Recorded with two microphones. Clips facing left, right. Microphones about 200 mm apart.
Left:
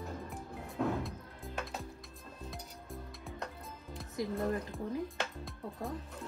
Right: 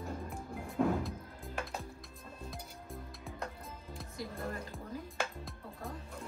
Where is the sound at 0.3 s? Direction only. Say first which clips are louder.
Right 1 dB; centre (ahead or behind).